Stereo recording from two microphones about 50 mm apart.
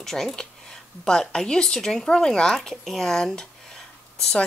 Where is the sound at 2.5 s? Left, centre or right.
Centre.